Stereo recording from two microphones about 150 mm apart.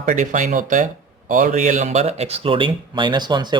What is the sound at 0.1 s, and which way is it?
Speech, 60° right (ahead or behind).